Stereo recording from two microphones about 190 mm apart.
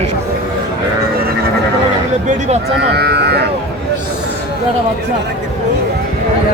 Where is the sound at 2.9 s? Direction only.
60° right (ahead or behind).